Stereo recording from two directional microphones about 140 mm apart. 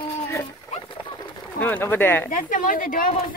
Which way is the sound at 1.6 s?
15° left (ahead or behind).